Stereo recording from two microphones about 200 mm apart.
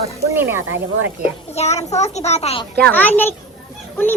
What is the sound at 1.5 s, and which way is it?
A child's voice, 35° left (ahead or behind).